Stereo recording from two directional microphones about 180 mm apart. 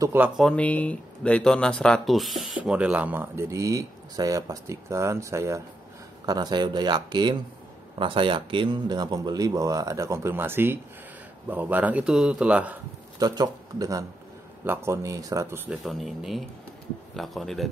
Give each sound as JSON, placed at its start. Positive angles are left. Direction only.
{"t": 0.0, "sound": "speech", "side_deg": -10}
{"t": 0.4, "sound": "speech", "side_deg": 5}
{"t": 13.2, "sound": "speech", "side_deg": -20}
{"t": 15.8, "sound": "speech", "side_deg": 0}